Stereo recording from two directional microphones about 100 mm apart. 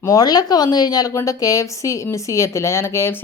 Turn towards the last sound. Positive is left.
turn(degrees=25)  # may be behind; listen again after turning